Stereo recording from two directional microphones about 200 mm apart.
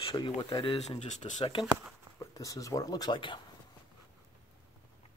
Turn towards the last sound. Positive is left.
turn(degrees=25)  # may be behind; listen again after turning